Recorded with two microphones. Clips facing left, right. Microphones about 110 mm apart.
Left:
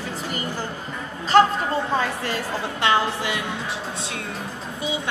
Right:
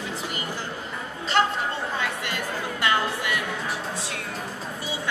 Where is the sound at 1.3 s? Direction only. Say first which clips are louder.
Left 7 dB; 40° left (ahead or behind); by 3.4 s 25° left (ahead or behind).